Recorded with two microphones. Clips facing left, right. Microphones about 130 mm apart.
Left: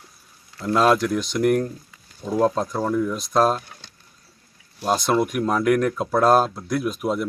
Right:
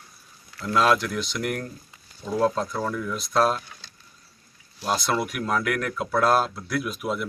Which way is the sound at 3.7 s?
60° left (ahead or behind).